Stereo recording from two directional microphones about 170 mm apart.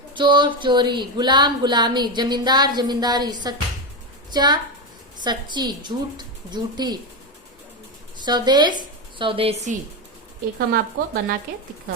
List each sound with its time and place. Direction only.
0.1 s speech: 30° right (ahead or behind)
8.2 s a woman's voice: 25° right (ahead or behind)
10.7 s speech: 60° right (ahead or behind)